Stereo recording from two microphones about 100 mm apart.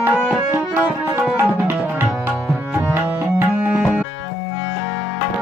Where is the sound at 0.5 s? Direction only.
20° right (ahead or behind).